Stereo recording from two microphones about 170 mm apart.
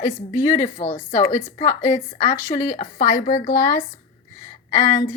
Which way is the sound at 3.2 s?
60° left (ahead or behind).